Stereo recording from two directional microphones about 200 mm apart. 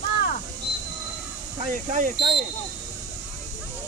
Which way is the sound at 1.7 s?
40° right (ahead or behind).